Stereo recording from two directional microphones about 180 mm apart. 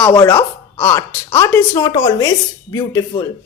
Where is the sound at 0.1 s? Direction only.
15° left (ahead or behind).